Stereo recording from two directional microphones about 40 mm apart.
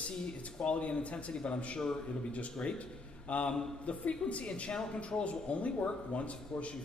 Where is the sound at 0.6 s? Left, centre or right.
Left.